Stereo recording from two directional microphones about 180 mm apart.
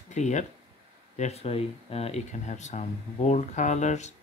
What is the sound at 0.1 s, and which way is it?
Speech, 40° left (ahead or behind).